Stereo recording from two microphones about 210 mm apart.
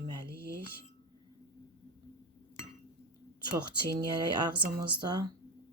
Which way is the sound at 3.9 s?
20° right (ahead or behind).